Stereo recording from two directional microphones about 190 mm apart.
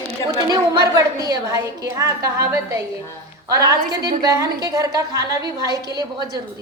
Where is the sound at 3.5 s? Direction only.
20° right (ahead or behind).